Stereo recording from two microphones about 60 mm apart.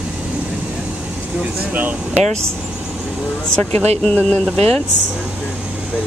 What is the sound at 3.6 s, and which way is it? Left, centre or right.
Speech, left.